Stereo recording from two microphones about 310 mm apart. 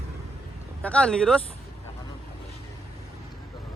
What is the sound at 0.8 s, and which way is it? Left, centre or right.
Speech, centre.